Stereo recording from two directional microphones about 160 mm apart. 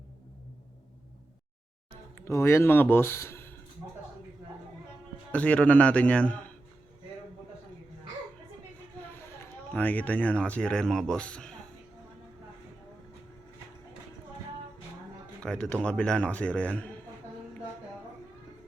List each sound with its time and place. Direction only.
2.1 s speech: 15° left (ahead or behind)
5.3 s speech: 10° left (ahead or behind)
9.4 s speech: 10° left (ahead or behind)
15.4 s speech: 5° left (ahead or behind)